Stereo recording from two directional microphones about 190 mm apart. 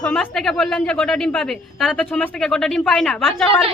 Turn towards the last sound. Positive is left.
turn(degrees=5)  # may be behind; listen again after turning